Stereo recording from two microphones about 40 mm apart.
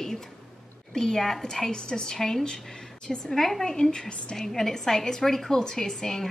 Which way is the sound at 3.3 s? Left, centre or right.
Centre.